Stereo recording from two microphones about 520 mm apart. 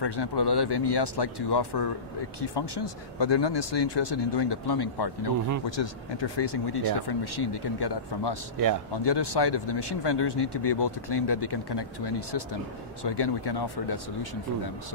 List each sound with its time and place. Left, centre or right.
0.0 s speech: left